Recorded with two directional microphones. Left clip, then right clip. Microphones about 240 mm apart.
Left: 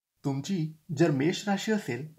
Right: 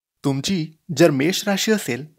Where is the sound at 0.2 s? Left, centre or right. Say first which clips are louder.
Right 10 dB; right.